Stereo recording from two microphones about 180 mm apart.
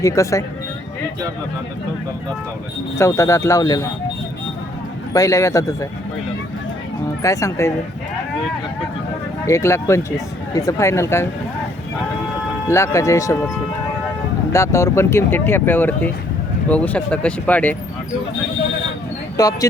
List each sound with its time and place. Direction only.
0.0 s speech: 15° left (ahead or behind)
3.0 s speech: 15° left (ahead or behind)
5.1 s speech: 20° left (ahead or behind)
7.2 s speech: 15° left (ahead or behind)
9.5 s speech: 15° left (ahead or behind)
12.6 s speech: 15° left (ahead or behind)
14.5 s speech: 15° left (ahead or behind)
19.4 s speech: 20° left (ahead or behind)